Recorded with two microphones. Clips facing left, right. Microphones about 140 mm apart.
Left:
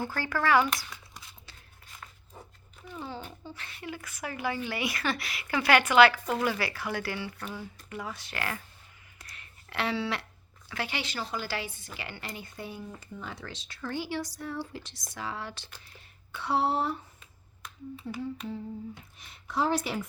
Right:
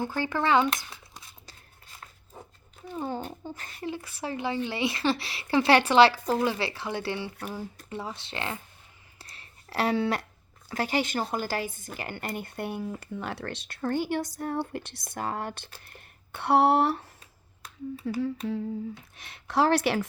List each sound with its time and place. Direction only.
0.0 s speech: 20° right (ahead or behind)
2.9 s speech: 45° right (ahead or behind)
3.9 s a woman's voice: 30° right (ahead or behind)
7.5 s a woman's voice: 40° right (ahead or behind); by 8.6 s 25° right (ahead or behind)
9.1 s a sound: 30° right (ahead or behind); by 10.2 s 45° right (ahead or behind)
10.7 s a woman's voice: 40° right (ahead or behind); by 17.1 s 70° right (ahead or behind)
19.1 s speech: 80° right